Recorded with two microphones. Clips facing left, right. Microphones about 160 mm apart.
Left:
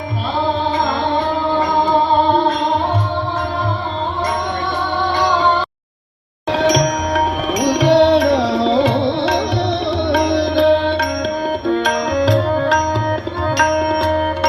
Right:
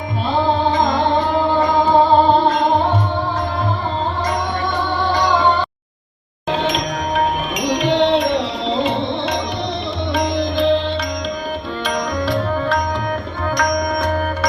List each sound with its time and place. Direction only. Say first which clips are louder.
7.6 s music: left 5 dB; 75° left (ahead or behind)
10.2 s music: left 3 dB; 65° left (ahead or behind)
12.1 s music: left 7 dB; 90° left
13.6 s music: left 3 dB; 60° left (ahead or behind)